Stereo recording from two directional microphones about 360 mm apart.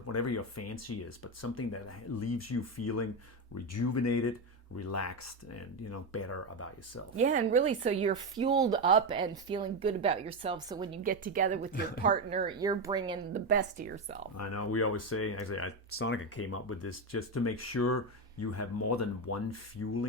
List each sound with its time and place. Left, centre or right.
0.1 s speech: left
7.2 s speech: centre
11.0 s speech: right
13.5 s speech: right
14.3 s speech: left